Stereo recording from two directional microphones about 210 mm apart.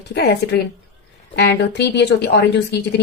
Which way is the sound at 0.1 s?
50° left (ahead or behind).